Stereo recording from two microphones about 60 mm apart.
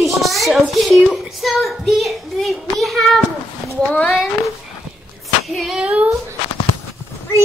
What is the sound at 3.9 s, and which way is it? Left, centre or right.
Speech, left.